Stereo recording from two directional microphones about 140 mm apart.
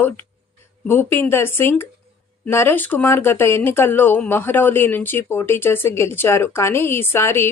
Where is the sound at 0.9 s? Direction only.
15° left (ahead or behind).